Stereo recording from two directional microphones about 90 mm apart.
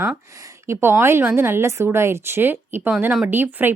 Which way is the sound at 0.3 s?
40° right (ahead or behind).